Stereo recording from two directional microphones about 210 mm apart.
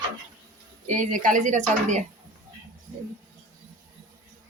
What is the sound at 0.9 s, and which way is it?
Speech, 35° right (ahead or behind).